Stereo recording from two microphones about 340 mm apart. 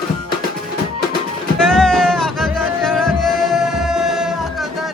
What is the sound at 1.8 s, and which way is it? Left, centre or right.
Music, centre.